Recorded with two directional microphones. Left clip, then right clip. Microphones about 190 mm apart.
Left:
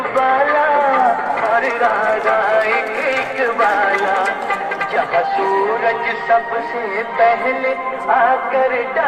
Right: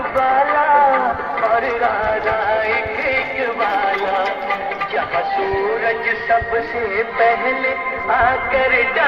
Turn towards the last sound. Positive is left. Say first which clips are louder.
# left 1 dB
turn(degrees=20)  # may be behind; listen again after turning